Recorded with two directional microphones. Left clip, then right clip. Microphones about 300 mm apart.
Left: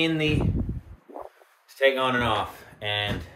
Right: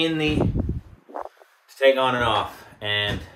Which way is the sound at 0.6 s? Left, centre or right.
Right.